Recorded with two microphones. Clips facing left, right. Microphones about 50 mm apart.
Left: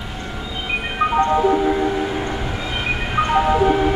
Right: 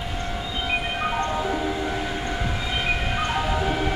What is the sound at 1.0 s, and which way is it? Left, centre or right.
Ice cream truck, left.